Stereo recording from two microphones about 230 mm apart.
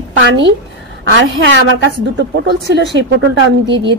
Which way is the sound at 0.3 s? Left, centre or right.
Right.